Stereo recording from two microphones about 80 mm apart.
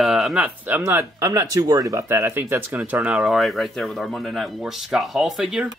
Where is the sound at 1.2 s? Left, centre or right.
Right.